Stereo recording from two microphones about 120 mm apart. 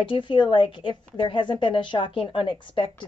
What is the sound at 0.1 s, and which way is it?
A woman's voice, 40° left (ahead or behind).